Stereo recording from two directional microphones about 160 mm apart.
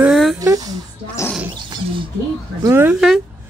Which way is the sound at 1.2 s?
15° left (ahead or behind).